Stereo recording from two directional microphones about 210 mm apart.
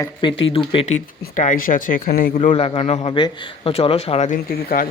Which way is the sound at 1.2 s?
40° left (ahead or behind).